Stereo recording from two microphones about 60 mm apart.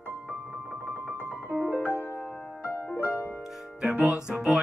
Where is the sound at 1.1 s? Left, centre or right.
Right.